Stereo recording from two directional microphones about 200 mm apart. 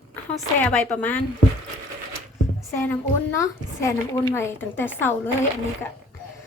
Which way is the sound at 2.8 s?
10° left (ahead or behind).